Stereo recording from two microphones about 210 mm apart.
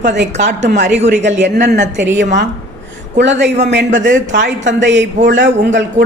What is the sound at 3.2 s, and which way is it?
Speech, 55° right (ahead or behind).